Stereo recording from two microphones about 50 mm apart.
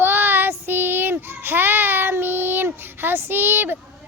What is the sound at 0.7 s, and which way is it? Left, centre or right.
A child's voice, right.